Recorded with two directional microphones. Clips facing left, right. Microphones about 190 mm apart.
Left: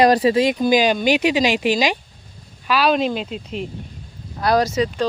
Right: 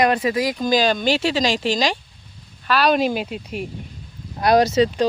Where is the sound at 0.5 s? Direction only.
15° left (ahead or behind).